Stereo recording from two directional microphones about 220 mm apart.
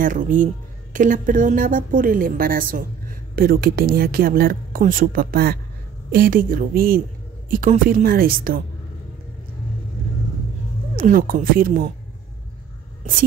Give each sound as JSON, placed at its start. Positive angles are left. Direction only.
{"t": 0.0, "sound": "speech", "side_deg": -35}
{"t": 11.0, "sound": "speech", "side_deg": -40}